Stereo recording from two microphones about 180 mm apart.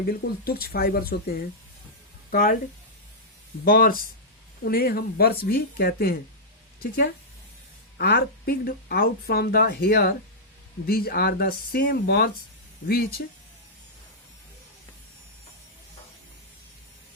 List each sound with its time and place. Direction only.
0.0 s speech: 55° left (ahead or behind)
3.6 s a woman's voice: 50° left (ahead or behind)